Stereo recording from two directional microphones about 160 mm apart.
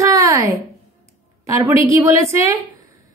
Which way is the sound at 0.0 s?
20° right (ahead or behind).